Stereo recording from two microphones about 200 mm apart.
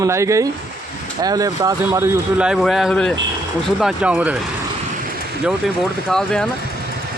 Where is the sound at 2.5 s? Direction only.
Centre (ahead or behind).